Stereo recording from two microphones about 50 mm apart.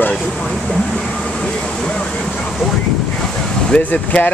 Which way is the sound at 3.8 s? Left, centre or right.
Left.